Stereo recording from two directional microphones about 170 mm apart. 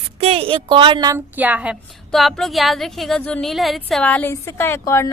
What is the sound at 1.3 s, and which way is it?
A woman's voice, 10° right (ahead or behind).